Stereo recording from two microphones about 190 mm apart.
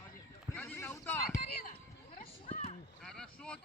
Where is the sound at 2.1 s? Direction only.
35° left (ahead or behind).